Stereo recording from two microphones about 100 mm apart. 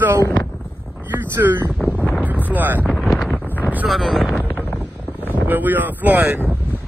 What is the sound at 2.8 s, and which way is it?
Wind noise, centre (ahead or behind).